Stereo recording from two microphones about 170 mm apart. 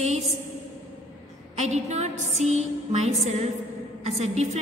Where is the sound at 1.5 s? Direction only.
40° right (ahead or behind).